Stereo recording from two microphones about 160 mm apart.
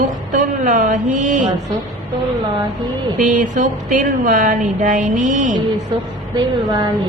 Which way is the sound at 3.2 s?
50° right (ahead or behind).